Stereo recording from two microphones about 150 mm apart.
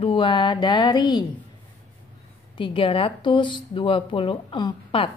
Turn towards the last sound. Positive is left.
turn(degrees=30)  # may be behind; listen again after turning